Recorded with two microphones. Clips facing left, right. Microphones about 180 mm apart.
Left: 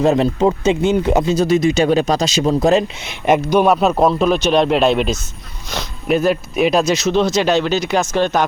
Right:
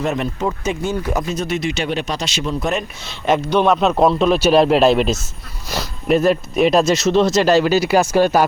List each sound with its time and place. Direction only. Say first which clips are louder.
0.0 s speech: left 7 dB; 30° left (ahead or behind)
3.2 s speech: left 2 dB; 10° left (ahead or behind); by 8.4 s 10° right (ahead or behind)